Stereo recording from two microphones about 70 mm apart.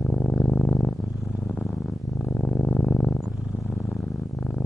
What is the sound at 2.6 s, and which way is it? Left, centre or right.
Music, centre.